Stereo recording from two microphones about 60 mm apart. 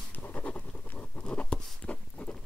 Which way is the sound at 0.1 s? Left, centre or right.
Left.